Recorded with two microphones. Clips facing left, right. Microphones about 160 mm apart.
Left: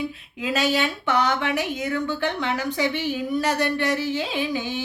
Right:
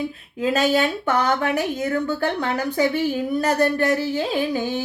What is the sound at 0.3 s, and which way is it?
Speech, 45° right (ahead or behind).